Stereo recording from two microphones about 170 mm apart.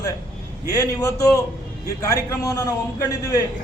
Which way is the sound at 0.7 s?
20° left (ahead or behind).